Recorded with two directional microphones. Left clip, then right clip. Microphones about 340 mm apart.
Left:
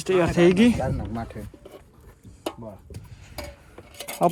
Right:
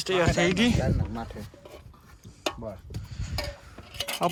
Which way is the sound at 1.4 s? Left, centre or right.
Left.